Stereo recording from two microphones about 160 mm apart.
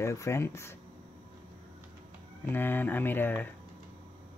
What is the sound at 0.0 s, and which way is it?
Speech, 20° left (ahead or behind).